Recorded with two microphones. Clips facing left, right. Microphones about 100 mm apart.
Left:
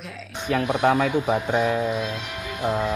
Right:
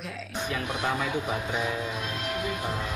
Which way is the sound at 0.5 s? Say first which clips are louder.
Left 10 dB; 60° left (ahead or behind).